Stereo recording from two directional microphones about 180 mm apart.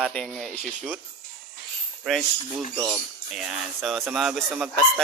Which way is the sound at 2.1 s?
Centre (ahead or behind).